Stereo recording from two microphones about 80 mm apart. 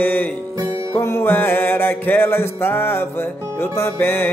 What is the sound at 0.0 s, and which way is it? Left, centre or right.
Music, left.